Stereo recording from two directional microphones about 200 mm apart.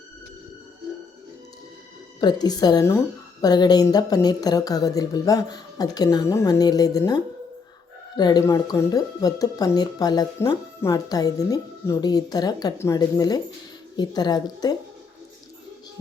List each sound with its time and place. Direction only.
2.2 s speech: 20° left (ahead or behind)